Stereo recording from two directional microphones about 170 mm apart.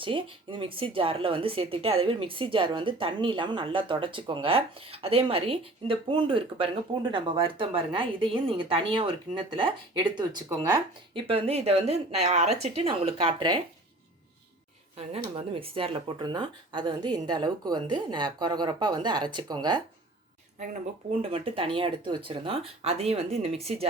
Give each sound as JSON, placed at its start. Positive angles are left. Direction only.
{"t": 0.0, "sound": "speech", "side_deg": -30}
{"t": 14.9, "sound": "speech", "side_deg": -35}
{"t": 21.2, "sound": "speech", "side_deg": -35}